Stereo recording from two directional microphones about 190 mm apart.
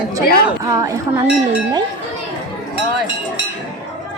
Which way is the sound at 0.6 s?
15° right (ahead or behind).